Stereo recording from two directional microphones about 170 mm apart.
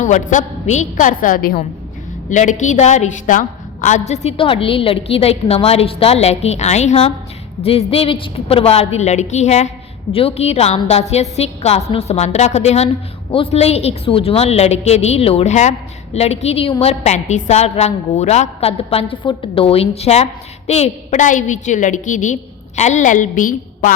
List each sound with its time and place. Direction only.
0.0 s a woman's voice: 45° left (ahead or behind)
2.3 s a woman's voice: 45° left (ahead or behind)